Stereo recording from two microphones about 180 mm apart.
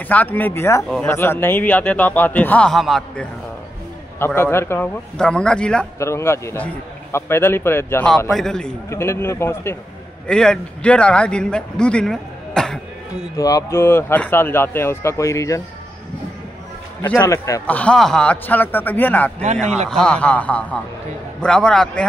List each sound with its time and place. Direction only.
0.1 s a man's voice: 10° left (ahead or behind)
0.8 s a man's voice: centre (ahead or behind)
1.1 s a man's voice: 15° left (ahead or behind)
4.4 s a man's voice: 15° left (ahead or behind)
8.3 s a man's voice: 5° left (ahead or behind)
8.9 s a man's voice: 15° left (ahead or behind)
13.4 s a man's voice: 20° left (ahead or behind)
17.0 s a man's voice: 10° left (ahead or behind)
19.4 s a man's voice: 40° right (ahead or behind)
19.9 s a man's voice: 5° left (ahead or behind)